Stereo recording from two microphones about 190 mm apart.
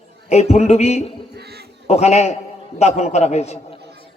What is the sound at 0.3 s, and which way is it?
Speech, 35° left (ahead or behind).